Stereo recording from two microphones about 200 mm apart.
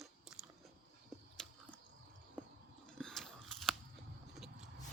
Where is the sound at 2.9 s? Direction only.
5° left (ahead or behind).